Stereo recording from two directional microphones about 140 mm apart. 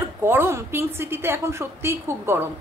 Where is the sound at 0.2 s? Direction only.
15° right (ahead or behind).